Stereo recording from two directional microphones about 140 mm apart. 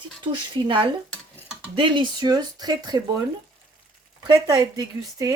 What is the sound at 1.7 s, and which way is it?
Speech, 35° right (ahead or behind).